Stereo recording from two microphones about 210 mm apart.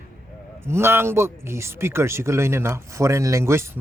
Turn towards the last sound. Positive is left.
turn(degrees=-10)  # may be behind; listen again after turning